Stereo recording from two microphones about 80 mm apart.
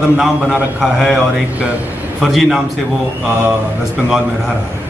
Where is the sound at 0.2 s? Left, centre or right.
Centre.